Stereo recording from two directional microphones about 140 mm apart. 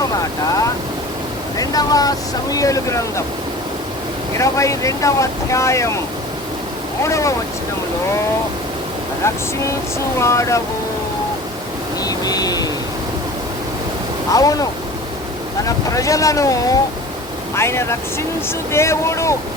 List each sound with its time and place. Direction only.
1.5 s speech: 25° left (ahead or behind)
4.4 s speech: 20° left (ahead or behind)
7.0 s speech: 20° left (ahead or behind)
9.2 s speech: 20° left (ahead or behind)
12.0 s vehicle: 25° left (ahead or behind)
14.3 s speech: 25° left (ahead or behind)